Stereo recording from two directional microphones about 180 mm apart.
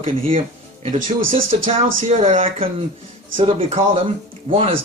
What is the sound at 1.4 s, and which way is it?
Speech, 50° right (ahead or behind).